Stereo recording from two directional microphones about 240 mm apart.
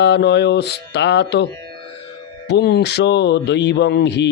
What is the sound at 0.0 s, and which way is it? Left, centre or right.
Speech, left.